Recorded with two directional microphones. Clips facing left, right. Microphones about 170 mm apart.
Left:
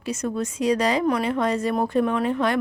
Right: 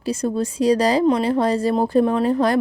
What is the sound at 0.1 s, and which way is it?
Speech, 30° right (ahead or behind).